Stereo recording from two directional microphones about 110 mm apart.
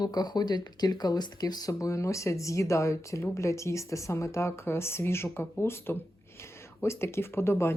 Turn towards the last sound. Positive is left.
turn(degrees=25)  # may be behind; listen again after turning